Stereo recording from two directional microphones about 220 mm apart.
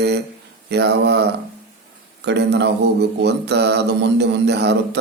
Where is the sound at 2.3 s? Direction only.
50° right (ahead or behind).